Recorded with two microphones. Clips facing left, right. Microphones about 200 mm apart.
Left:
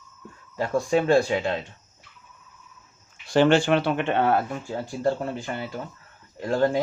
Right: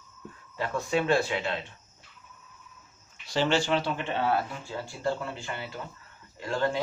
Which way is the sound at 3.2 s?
55° left (ahead or behind).